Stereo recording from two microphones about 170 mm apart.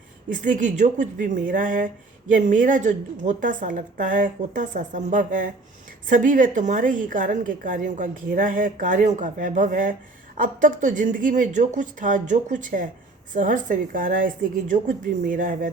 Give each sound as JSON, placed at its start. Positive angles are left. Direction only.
{"t": 0.3, "sound": "a woman's voice", "side_deg": -50}